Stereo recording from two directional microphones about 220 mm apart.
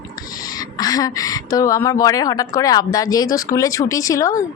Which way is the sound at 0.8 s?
15° left (ahead or behind).